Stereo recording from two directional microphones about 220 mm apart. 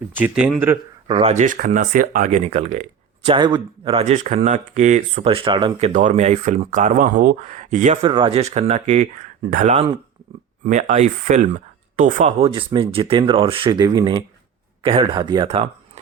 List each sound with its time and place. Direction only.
0.1 s speech: 5° right (ahead or behind)
1.0 s speech: 25° right (ahead or behind)
3.2 s speech: 20° right (ahead or behind)
5.9 s speech: 35° right (ahead or behind)